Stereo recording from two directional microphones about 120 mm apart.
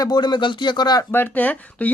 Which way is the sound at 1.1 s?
15° left (ahead or behind).